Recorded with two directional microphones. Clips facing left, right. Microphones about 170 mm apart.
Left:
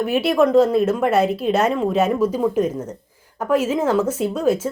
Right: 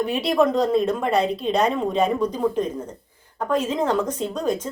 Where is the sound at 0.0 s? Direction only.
5° left (ahead or behind).